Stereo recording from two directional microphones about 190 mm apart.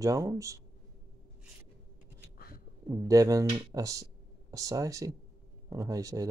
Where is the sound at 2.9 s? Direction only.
20° right (ahead or behind).